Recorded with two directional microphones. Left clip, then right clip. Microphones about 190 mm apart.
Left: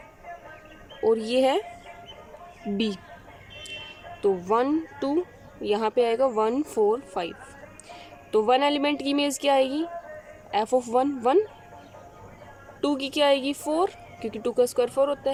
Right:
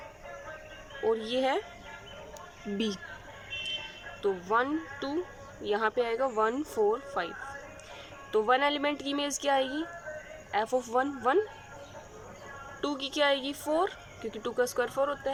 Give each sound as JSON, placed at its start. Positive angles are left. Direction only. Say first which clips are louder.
{"t": 1.0, "sound": "speech", "louder": "left 7 dB", "side_deg": 25}
{"t": 2.7, "sound": "speech", "louder": "left 4 dB", "side_deg": 15}
{"t": 4.2, "sound": "speech", "louder": "left 5 dB", "side_deg": 25}
{"t": 12.8, "sound": "speech", "louder": "left 5 dB", "side_deg": 25}